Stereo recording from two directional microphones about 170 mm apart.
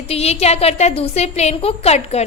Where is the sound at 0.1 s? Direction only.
35° left (ahead or behind).